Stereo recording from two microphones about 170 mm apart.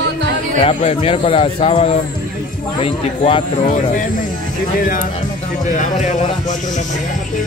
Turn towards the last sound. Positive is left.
turn(degrees=45)  # may be behind; listen again after turning